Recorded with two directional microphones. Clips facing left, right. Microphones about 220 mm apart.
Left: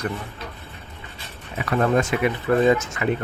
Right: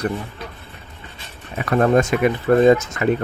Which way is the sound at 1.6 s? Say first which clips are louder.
Right 4 dB; 45° right (ahead or behind).